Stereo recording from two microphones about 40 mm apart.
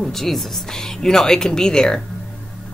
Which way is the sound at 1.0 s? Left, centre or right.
Centre.